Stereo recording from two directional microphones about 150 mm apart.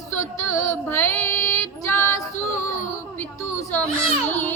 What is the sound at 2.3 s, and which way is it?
Child singing, 55° left (ahead or behind).